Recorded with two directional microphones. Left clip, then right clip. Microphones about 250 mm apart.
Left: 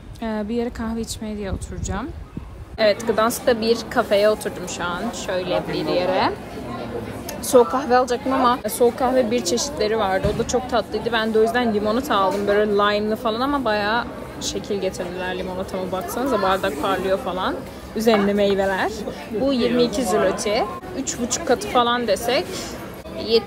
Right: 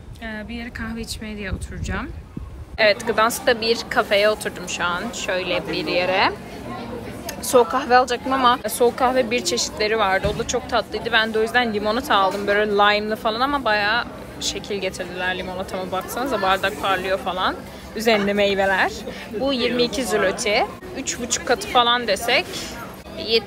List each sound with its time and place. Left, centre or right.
0.2 s speech: centre
7.4 s speech: centre